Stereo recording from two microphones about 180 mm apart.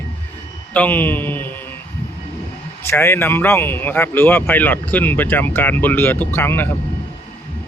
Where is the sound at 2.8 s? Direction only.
15° left (ahead or behind).